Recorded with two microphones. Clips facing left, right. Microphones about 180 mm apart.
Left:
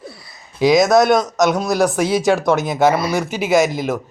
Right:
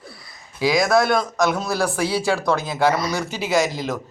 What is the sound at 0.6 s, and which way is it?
A man's voice, 20° left (ahead or behind).